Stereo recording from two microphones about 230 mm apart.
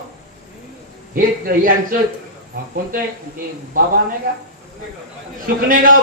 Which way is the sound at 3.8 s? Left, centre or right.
Right.